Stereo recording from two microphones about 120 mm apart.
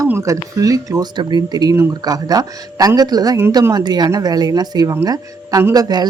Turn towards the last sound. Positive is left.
turn(degrees=-35)  # may be behind; listen again after turning